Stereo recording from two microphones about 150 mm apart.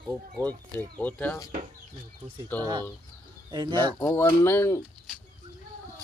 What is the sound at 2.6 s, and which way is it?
Speech, 30° right (ahead or behind).